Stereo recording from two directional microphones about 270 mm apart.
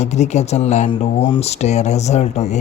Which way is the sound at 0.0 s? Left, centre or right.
Left.